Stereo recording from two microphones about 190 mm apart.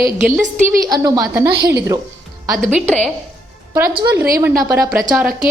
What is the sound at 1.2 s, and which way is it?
Speech, 10° right (ahead or behind).